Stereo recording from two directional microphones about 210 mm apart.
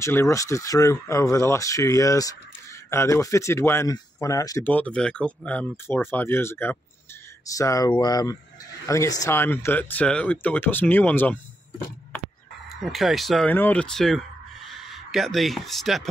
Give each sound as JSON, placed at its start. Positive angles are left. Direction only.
{"t": 0.0, "sound": "speech", "side_deg": 15}
{"t": 12.7, "sound": "speech", "side_deg": 0}